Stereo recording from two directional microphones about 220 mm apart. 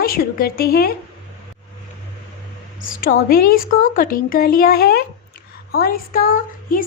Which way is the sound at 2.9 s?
40° left (ahead or behind).